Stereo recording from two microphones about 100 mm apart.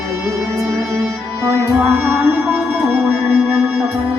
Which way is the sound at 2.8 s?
Centre (ahead or behind).